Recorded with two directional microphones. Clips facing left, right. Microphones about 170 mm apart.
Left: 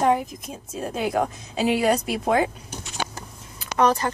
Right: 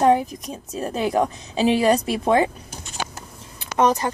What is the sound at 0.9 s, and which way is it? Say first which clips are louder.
A woman's voice: right 3 dB; 30° right (ahead or behind).